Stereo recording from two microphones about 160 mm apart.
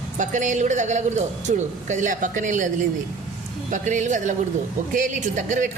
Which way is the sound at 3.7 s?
50° right (ahead or behind).